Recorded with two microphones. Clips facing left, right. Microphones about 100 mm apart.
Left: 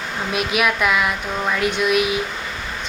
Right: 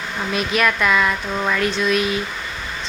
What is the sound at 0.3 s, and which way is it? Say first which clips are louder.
Speech: even; 5° left (ahead or behind).